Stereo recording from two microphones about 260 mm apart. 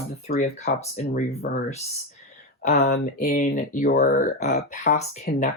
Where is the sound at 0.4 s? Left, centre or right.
Left.